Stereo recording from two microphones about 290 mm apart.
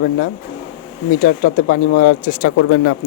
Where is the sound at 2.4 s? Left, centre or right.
Left.